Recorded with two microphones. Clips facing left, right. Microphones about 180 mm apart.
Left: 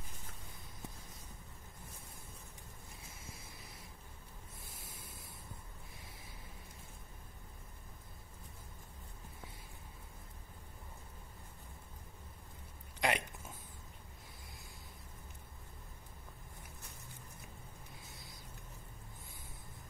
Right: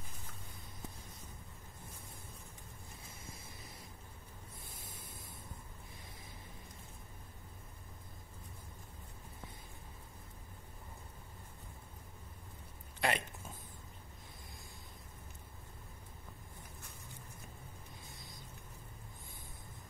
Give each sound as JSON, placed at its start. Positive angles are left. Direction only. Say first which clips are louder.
{"t": 13.0, "sound": "speech", "louder": "even", "side_deg": 15}